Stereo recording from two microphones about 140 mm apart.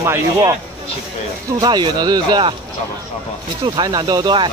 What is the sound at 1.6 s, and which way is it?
Speech, 30° right (ahead or behind).